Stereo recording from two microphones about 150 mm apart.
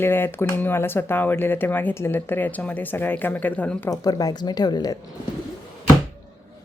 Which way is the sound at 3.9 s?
25° left (ahead or behind).